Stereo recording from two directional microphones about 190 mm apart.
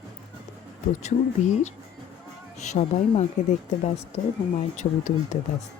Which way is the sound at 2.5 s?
35° left (ahead or behind).